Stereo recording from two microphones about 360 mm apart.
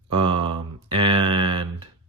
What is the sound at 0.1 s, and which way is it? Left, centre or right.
Mantra, centre.